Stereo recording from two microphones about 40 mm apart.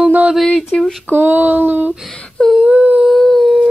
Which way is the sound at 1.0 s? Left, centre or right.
Right.